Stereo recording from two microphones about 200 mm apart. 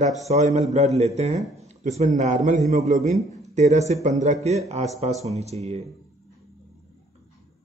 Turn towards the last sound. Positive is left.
turn(degrees=-30)  # may be behind; listen again after turning